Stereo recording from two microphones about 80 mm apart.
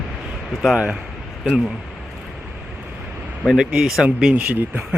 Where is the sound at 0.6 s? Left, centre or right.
Centre.